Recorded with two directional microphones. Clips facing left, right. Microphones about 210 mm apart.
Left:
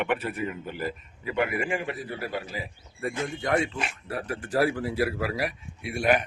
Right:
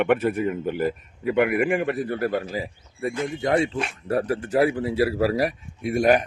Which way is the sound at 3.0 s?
20° right (ahead or behind).